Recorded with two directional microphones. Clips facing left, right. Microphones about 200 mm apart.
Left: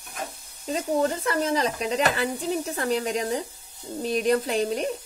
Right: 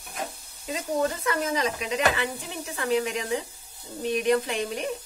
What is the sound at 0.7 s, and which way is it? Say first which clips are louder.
Speech: left 3 dB; 30° left (ahead or behind).